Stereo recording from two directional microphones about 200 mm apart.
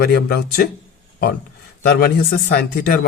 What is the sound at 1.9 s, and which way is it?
Speech, 50° left (ahead or behind).